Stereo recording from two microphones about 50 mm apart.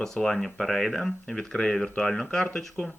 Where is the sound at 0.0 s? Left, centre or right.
Centre.